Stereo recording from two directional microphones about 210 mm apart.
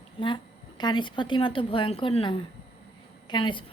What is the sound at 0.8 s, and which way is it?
A woman's voice, 20° left (ahead or behind).